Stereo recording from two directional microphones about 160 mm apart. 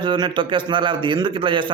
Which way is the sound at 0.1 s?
30° right (ahead or behind).